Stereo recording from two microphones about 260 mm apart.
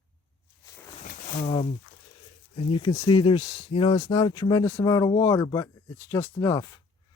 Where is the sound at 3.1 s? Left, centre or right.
Centre.